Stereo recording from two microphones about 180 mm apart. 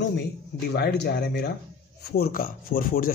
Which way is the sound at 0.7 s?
65° left (ahead or behind).